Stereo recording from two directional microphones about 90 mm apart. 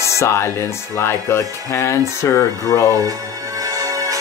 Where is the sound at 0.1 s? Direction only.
30° left (ahead or behind).